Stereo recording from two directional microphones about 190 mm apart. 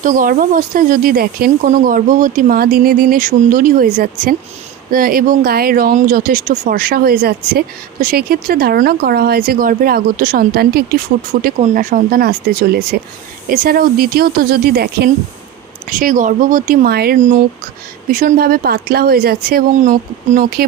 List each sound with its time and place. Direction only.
0.0 s speech: 45° right (ahead or behind)
11.4 s speech: 40° right (ahead or behind)